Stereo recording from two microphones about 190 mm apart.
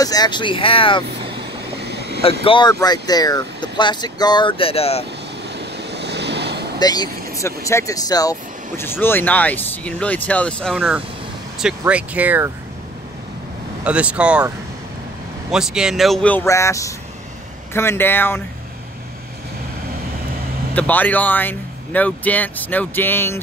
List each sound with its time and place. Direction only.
0.0 s speech: 20° left (ahead or behind)
1.8 s vehicle: 60° right (ahead or behind)
2.4 s speech: 25° left (ahead or behind)
5.5 s waves: 65° right (ahead or behind)
6.8 s speech: 20° left (ahead or behind); by 10.8 s 5° left (ahead or behind)
10.8 s speech: 5° right (ahead or behind)
13.8 s speech: 5° right (ahead or behind)
15.5 s speech: 5° right (ahead or behind)
20.7 s speech: 10° left (ahead or behind)